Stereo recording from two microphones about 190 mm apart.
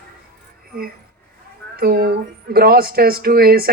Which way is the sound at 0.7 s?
50° right (ahead or behind).